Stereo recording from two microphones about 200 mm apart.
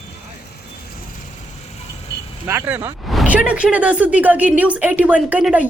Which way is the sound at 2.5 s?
10° right (ahead or behind).